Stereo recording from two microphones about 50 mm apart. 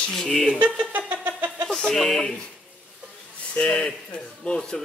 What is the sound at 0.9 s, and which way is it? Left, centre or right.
Music, right.